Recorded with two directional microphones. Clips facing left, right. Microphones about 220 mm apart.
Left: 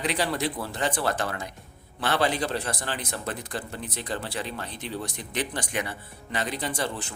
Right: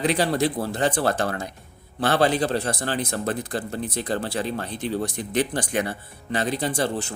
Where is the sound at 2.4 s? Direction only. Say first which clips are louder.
Right 5 dB; 30° right (ahead or behind).